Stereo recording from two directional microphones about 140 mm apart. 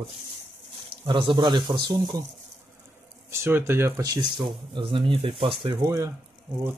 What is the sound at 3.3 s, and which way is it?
Speech, 15° right (ahead or behind).